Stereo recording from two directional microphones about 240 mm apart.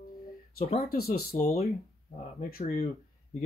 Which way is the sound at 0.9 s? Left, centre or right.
Left.